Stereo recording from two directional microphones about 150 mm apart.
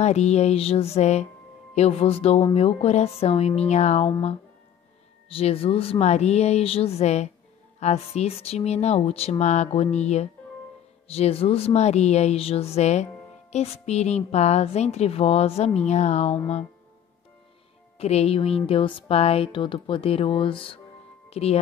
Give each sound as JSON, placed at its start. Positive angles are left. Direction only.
{"t": 0.0, "sound": "speech", "side_deg": 50}
{"t": 17.9, "sound": "speech", "side_deg": 45}